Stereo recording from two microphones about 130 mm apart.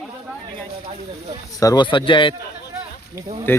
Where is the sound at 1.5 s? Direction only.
30° left (ahead or behind).